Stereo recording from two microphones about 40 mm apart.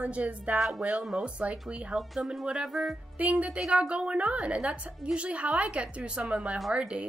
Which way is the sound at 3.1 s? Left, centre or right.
Right.